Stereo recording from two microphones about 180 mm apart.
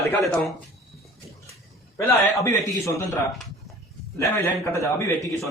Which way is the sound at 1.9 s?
15° left (ahead or behind).